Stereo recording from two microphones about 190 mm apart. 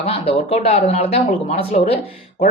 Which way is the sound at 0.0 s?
30° left (ahead or behind).